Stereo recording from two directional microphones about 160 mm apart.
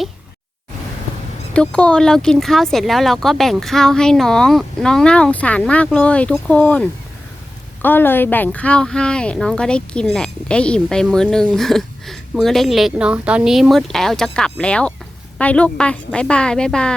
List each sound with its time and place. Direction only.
1.5 s a woman's voice: 5° left (ahead or behind)